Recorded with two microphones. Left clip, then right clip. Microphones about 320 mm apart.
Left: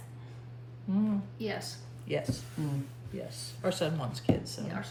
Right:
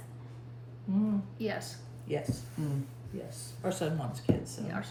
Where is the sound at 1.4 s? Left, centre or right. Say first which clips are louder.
Right 1 dB; centre.